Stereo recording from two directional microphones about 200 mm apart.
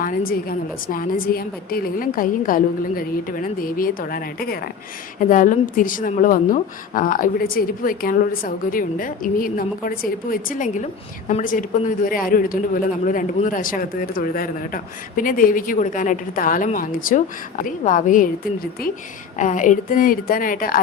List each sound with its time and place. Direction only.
0.3 s a man's voice: 45° left (ahead or behind)